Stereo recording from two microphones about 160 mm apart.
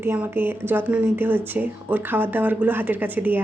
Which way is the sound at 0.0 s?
15° right (ahead or behind).